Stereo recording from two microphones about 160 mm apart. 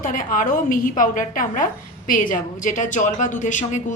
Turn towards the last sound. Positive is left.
turn(degrees=50)  # may be behind; listen again after turning